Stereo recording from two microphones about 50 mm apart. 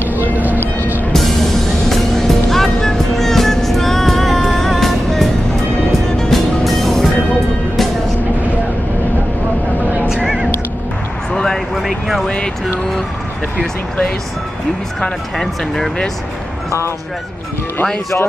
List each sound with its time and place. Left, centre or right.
0.3 s music: right
1.1 s music: centre
10.0 s music: centre
11.3 s a sound: centre
15.0 s speech: centre